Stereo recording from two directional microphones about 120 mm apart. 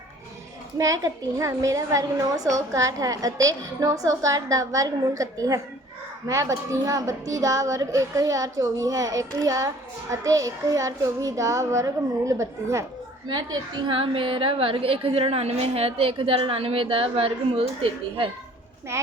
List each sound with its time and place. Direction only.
0.8 s speech: 25° right (ahead or behind)
13.2 s a woman's voice: 40° right (ahead or behind)